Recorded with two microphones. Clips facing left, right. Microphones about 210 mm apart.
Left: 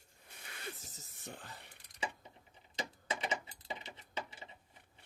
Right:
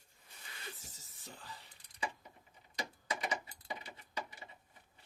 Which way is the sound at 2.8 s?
25° left (ahead or behind).